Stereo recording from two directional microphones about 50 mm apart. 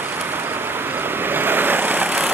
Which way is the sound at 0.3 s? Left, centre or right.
Right.